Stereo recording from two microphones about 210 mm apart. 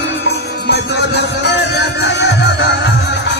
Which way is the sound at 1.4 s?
55° left (ahead or behind).